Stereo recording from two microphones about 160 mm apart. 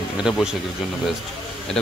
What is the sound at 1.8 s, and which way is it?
Speech, 5° left (ahead or behind).